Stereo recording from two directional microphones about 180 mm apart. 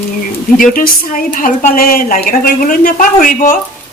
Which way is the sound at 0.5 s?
50° left (ahead or behind).